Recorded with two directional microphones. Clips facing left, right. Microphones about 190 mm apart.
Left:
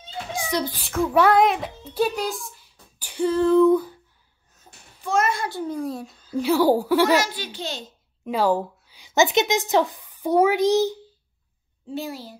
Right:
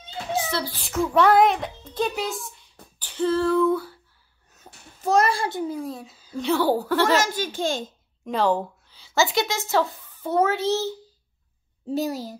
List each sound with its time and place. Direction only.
0.3 s a sound: 15° left (ahead or behind)
0.8 s a child's voice: centre (ahead or behind)
3.0 s female singing: 10° left (ahead or behind)
4.7 s a sound: 65° right (ahead or behind)
5.0 s a child's voice: 35° right (ahead or behind)
5.7 s a child's voice: centre (ahead or behind)
6.5 s a woman's voice: 10° left (ahead or behind)
7.2 s a child's voice: 45° right (ahead or behind)
8.3 s speech: 10° left (ahead or behind)
11.9 s a child's voice: 40° right (ahead or behind)